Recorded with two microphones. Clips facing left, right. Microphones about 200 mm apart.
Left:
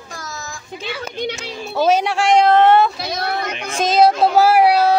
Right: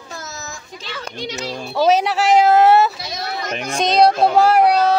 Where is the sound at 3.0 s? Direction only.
60° left (ahead or behind).